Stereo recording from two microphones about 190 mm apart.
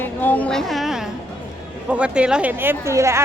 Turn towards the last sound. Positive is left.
turn(degrees=-15)  # may be behind; listen again after turning